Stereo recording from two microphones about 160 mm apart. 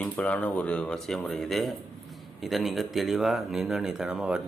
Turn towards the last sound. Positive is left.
turn(degrees=-5)  # may be behind; listen again after turning